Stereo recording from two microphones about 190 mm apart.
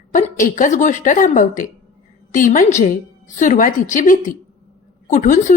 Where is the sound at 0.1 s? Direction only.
40° left (ahead or behind).